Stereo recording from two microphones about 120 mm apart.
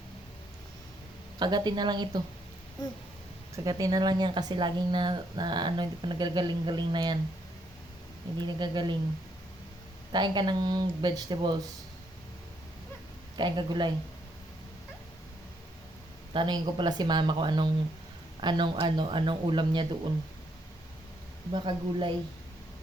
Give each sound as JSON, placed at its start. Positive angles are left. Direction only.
{"t": 1.4, "sound": "speech", "side_deg": -35}
{"t": 3.5, "sound": "speech", "side_deg": -30}
{"t": 8.4, "sound": "speech", "side_deg": -40}
{"t": 10.1, "sound": "speech", "side_deg": -40}
{"t": 13.3, "sound": "speech", "side_deg": -40}
{"t": 16.3, "sound": "speech", "side_deg": -40}
{"t": 21.5, "sound": "a woman's voice", "side_deg": -45}